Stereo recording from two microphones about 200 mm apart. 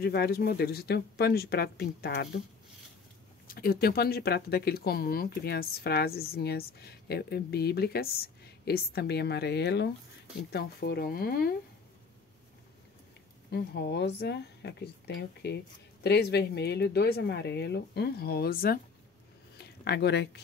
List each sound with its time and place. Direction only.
0.0 s speech: 50° left (ahead or behind)
3.4 s speech: 50° left (ahead or behind)
13.5 s a woman's voice: 55° left (ahead or behind)